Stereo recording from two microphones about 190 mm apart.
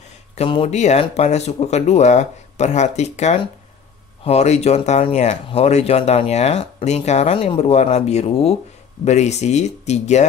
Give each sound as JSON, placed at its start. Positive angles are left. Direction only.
{"t": 0.4, "sound": "speech", "side_deg": 30}